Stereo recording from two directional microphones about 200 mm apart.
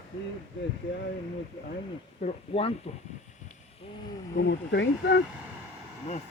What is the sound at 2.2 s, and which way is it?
Speech, 30° left (ahead or behind).